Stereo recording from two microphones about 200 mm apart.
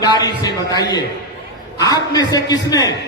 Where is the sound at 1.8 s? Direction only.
20° left (ahead or behind).